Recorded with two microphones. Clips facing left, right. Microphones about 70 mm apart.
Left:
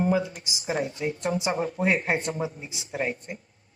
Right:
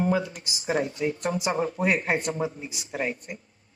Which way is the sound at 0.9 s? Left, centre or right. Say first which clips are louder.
Right 1 dB; left.